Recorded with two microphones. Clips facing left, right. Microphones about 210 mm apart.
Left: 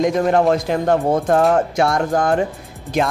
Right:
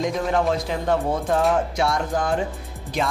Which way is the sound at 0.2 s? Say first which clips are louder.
Left 6 dB; 55° left (ahead or behind).